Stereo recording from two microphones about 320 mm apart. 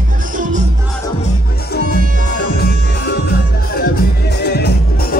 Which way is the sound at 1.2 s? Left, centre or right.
Left.